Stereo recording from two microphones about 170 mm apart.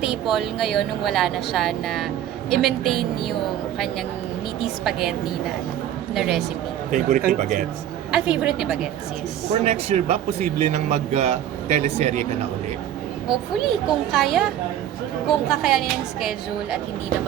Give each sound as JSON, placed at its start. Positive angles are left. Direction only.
{"t": 0.0, "sound": "a woman's voice", "side_deg": -5}
{"t": 4.6, "sound": "a woman's voice", "side_deg": -5}
{"t": 6.1, "sound": "a woman's voice", "side_deg": 0}
{"t": 7.3, "sound": "speech", "side_deg": -45}
{"t": 8.1, "sound": "a woman's voice", "side_deg": -5}
{"t": 9.6, "sound": "a man's voice", "side_deg": -40}
{"t": 13.3, "sound": "a woman's voice", "side_deg": 0}